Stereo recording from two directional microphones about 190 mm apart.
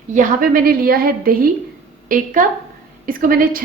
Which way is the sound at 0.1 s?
45° right (ahead or behind).